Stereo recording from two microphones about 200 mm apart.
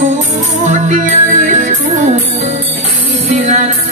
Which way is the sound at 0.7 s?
35° right (ahead or behind).